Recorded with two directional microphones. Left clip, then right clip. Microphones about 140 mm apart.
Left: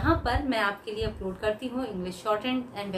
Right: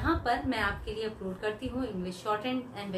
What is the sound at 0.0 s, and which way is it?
A woman's voice, 25° left (ahead or behind).